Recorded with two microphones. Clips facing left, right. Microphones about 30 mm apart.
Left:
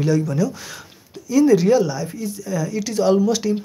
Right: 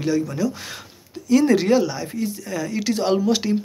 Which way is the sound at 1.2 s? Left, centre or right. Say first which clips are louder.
Left 2 dB; right.